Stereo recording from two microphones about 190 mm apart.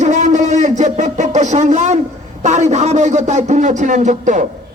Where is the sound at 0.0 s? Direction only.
40° right (ahead or behind).